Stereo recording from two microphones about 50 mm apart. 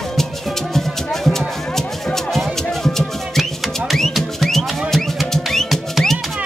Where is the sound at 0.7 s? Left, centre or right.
Centre.